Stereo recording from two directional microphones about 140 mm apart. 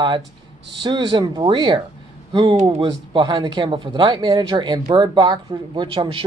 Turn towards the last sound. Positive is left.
turn(degrees=-35)  # may be behind; listen again after turning